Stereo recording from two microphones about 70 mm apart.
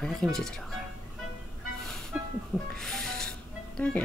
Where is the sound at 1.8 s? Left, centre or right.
Centre.